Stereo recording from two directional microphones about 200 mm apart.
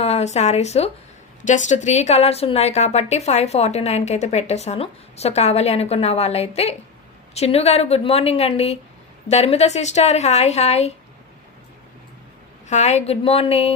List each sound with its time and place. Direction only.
0.0 s a woman's voice: 35° left (ahead or behind)
12.6 s a woman's voice: 35° left (ahead or behind)